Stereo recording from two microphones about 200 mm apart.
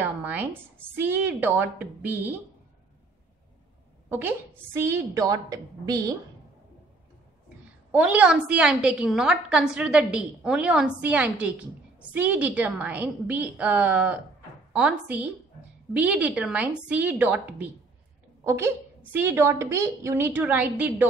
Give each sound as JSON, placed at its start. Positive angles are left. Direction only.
{"t": 0.0, "sound": "a woman's voice", "side_deg": -10}
{"t": 4.1, "sound": "a woman's voice", "side_deg": -10}
{"t": 7.9, "sound": "a woman's voice", "side_deg": -5}